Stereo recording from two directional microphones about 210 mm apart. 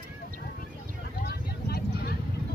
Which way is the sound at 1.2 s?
45° left (ahead or behind).